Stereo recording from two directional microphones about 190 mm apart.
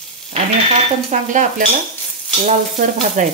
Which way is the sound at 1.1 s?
40° right (ahead or behind).